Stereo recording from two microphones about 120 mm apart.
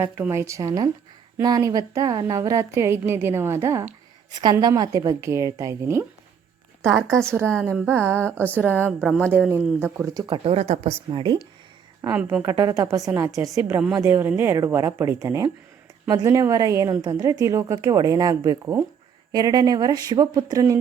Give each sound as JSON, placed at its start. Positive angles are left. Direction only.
{"t": 0.0, "sound": "a woman's voice", "side_deg": -20}
{"t": 4.3, "sound": "a woman's voice", "side_deg": -35}
{"t": 7.2, "sound": "a woman's voice", "side_deg": -20}
{"t": 7.4, "sound": "a woman's voice", "side_deg": 10}
{"t": 7.9, "sound": "a woman's voice", "side_deg": -20}
{"t": 8.9, "sound": "a woman's voice", "side_deg": -5}
{"t": 9.5, "sound": "a woman's voice", "side_deg": -20}
{"t": 10.2, "sound": "speech", "side_deg": -50}
{"t": 11.1, "sound": "speech", "side_deg": -40}
{"t": 12.0, "sound": "a woman's voice", "side_deg": -15}
{"t": 12.4, "sound": "a woman's voice", "side_deg": -25}